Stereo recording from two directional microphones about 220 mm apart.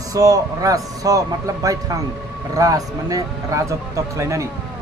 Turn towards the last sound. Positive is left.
turn(degrees=-15)  # may be behind; listen again after turning